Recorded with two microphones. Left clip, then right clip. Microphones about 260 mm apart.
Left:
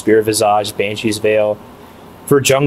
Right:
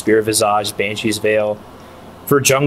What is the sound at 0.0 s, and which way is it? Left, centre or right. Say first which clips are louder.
Speech: left 2 dB; centre.